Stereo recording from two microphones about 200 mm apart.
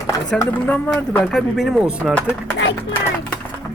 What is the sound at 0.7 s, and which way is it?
Speech, 5° left (ahead or behind).